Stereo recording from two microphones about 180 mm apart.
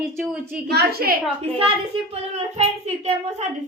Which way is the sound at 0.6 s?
60° right (ahead or behind).